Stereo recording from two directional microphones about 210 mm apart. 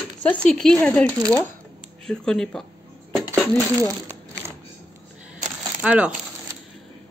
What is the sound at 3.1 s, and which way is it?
Dishes, centre (ahead or behind).